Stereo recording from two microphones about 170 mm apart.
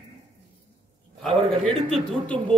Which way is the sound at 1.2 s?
Centre (ahead or behind).